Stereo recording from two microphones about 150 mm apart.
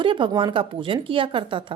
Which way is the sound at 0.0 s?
35° right (ahead or behind).